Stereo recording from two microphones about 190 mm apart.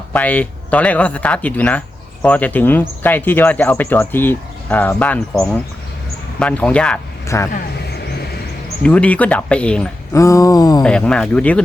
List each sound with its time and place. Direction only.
0.1 s speech: 10° left (ahead or behind)
8.8 s speech: 5° left (ahead or behind)
10.2 s a sound: 15° left (ahead or behind)
10.8 s speech: 5° left (ahead or behind)